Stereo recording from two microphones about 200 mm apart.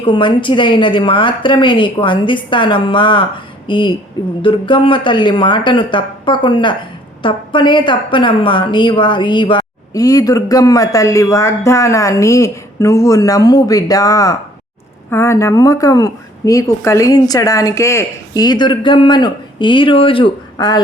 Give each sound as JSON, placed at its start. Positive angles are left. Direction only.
{"t": 0.0, "sound": "a woman's voice", "side_deg": 25}